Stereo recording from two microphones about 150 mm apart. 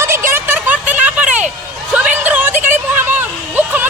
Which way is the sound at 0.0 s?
15° right (ahead or behind).